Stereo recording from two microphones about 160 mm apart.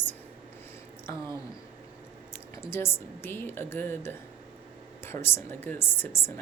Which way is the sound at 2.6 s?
15° left (ahead or behind).